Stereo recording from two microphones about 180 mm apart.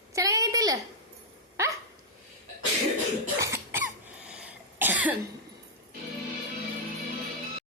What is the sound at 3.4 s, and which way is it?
Cough, 15° right (ahead or behind).